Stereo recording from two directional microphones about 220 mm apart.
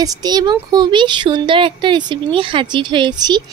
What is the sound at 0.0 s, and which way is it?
Speech, 15° right (ahead or behind).